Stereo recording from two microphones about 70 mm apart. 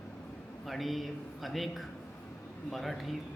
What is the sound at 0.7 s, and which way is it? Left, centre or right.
A man's voice, centre.